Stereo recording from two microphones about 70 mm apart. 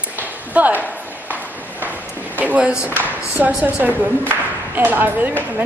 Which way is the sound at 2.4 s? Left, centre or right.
Right.